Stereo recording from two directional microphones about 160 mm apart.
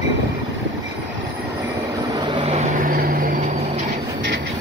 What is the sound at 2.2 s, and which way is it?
Vehicle, 35° right (ahead or behind).